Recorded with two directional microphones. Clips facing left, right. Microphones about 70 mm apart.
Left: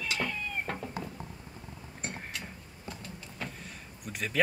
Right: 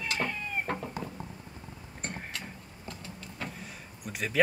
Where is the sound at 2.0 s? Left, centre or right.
Centre.